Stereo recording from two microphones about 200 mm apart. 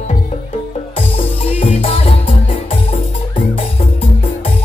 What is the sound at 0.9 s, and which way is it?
Music, 30° left (ahead or behind).